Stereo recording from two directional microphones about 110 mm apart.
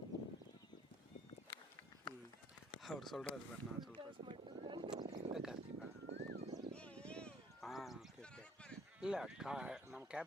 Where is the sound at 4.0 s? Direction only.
50° right (ahead or behind).